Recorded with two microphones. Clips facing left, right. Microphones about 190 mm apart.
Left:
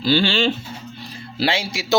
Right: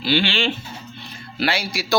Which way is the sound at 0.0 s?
40° left (ahead or behind).